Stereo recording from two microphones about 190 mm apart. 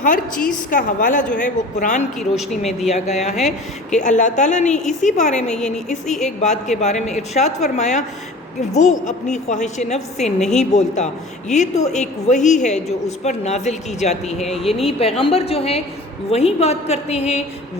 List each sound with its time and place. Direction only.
0.7 s a woman's voice: 45° left (ahead or behind)
2.1 s a woman's voice: centre (ahead or behind)
2.8 s a woman's voice: 35° left (ahead or behind)